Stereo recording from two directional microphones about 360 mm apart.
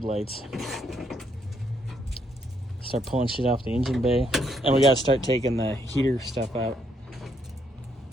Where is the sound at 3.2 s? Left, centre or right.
Centre.